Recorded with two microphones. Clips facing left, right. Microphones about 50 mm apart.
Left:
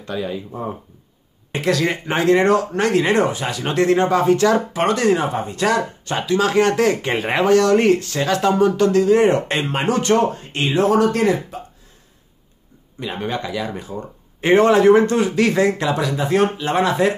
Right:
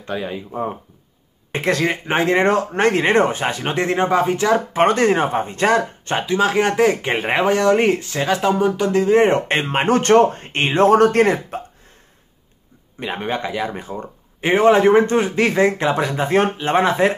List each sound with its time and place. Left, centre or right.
0.0 s speech: right
4.7 s speech: right; by 8.9 s centre
8.9 s speech: right
13.0 s speech: right
14.4 s speech: centre; by 17.1 s right